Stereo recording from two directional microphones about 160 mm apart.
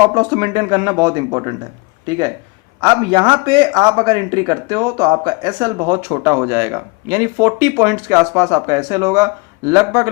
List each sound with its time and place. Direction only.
0.1 s speech: 25° right (ahead or behind)